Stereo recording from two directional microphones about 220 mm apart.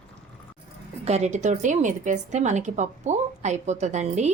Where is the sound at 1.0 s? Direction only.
30° right (ahead or behind).